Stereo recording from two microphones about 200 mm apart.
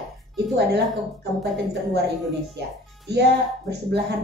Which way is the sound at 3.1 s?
55° right (ahead or behind).